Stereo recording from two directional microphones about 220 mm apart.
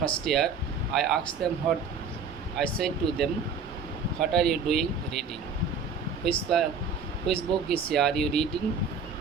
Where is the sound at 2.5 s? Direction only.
Centre (ahead or behind).